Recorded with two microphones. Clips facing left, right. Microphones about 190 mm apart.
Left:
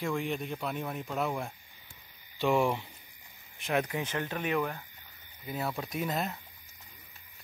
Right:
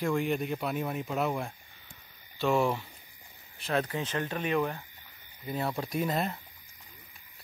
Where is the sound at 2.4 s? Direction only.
15° left (ahead or behind).